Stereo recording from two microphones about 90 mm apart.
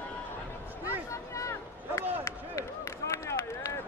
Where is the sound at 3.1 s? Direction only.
35° left (ahead or behind).